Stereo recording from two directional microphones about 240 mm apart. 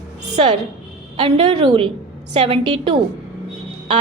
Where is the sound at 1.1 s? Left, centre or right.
Right.